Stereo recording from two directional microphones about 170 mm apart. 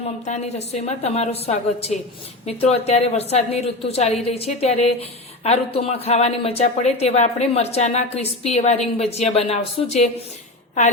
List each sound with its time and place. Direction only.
0.3 s speech: 40° left (ahead or behind)